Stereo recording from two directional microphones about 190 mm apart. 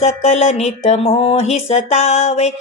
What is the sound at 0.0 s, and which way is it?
Music, 35° left (ahead or behind).